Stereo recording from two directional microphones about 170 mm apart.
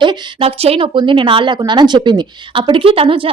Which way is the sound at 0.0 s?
25° right (ahead or behind).